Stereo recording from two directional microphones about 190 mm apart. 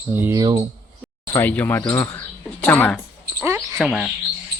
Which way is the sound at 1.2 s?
15° left (ahead or behind).